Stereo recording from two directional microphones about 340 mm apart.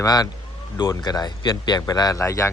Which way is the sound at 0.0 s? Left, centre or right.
Centre.